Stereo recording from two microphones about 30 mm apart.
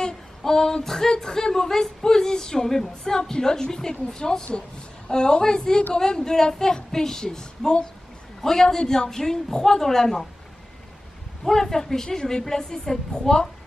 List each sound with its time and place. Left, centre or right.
0.4 s a sound: centre
0.8 s a woman's voice: centre
11.4 s a woman's voice: centre